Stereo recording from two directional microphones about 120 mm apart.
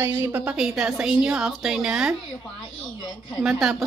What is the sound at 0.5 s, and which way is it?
Speech, 5° right (ahead or behind).